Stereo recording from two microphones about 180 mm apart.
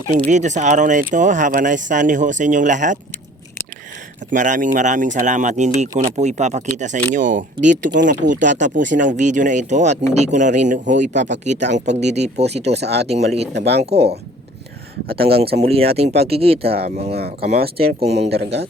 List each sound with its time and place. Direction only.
0.1 s speech: 40° right (ahead or behind)
4.3 s speech: 45° right (ahead or behind)
12.7 s speech: 65° right (ahead or behind)
13.1 s speech: 35° right (ahead or behind)
13.5 s speech: 70° right (ahead or behind)
15.2 s speech: 60° right (ahead or behind)
15.6 s speech: 35° right (ahead or behind)
17.1 s speech: 60° right (ahead or behind)